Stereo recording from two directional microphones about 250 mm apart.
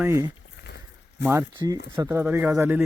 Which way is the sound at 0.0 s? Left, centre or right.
Centre.